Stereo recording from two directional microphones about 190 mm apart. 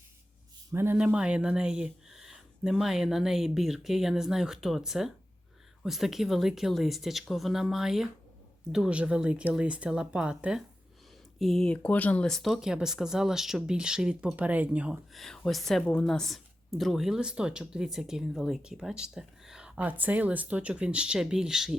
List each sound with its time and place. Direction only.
0.7 s speech: 10° right (ahead or behind)